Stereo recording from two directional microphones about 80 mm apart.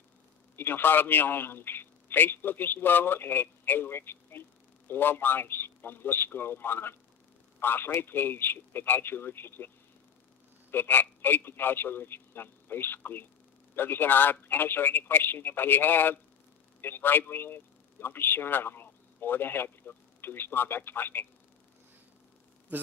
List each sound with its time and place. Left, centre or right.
0.6 s a man's voice: left
10.7 s a man's voice: left